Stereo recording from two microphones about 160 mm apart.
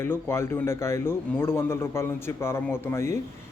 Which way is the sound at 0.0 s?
15° left (ahead or behind).